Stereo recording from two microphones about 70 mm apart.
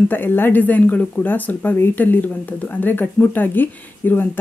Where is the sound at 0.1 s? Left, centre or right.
Left.